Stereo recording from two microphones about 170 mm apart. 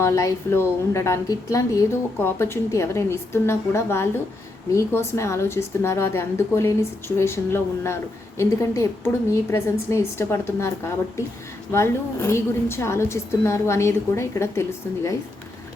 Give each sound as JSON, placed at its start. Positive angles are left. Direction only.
{"t": 0.0, "sound": "a woman's voice", "side_deg": 15}